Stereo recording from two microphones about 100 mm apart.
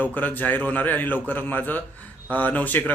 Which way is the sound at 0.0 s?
15° left (ahead or behind).